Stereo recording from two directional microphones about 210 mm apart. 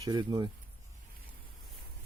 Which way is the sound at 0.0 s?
20° right (ahead or behind).